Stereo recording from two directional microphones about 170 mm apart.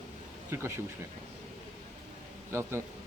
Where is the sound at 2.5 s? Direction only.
15° right (ahead or behind).